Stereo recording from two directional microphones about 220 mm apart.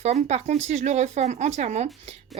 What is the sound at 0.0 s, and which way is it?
Speech, 30° right (ahead or behind).